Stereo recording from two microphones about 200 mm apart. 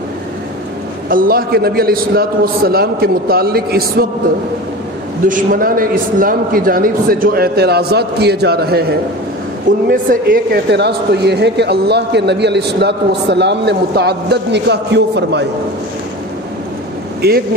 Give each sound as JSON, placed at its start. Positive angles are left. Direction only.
{"t": 1.0, "sound": "a man's voice", "side_deg": -45}
{"t": 5.3, "sound": "a man's voice", "side_deg": -45}
{"t": 17.2, "sound": "a man's voice", "side_deg": -50}